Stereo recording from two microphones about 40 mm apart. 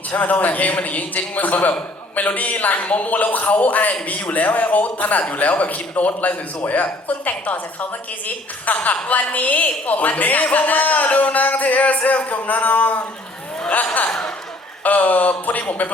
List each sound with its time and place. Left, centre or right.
0.1 s a man's voice: left
14.1 s a sound: centre
14.8 s speech: left